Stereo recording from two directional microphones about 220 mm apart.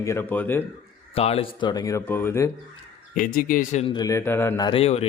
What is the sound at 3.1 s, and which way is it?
Speech, 40° left (ahead or behind).